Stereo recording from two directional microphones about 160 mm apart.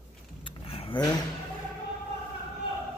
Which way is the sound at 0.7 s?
35° left (ahead or behind).